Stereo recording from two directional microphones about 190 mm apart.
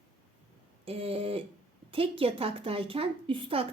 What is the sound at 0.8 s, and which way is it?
A woman's voice, 30° right (ahead or behind).